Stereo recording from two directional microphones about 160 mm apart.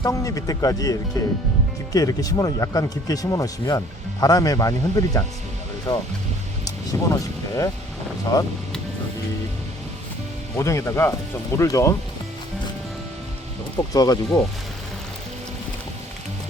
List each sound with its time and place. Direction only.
0.0 s speech: 20° left (ahead or behind)
10.6 s speech: 20° left (ahead or behind)
13.9 s speech: 25° left (ahead or behind)